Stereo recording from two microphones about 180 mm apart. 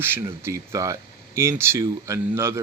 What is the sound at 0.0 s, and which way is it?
Speech, 15° right (ahead or behind).